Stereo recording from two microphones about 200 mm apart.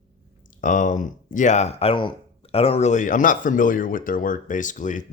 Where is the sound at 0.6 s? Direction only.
40° left (ahead or behind).